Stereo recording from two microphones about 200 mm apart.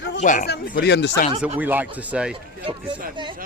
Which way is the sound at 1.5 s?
10° right (ahead or behind).